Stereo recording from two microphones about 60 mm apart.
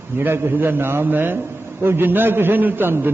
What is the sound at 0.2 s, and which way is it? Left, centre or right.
A man's voice, right.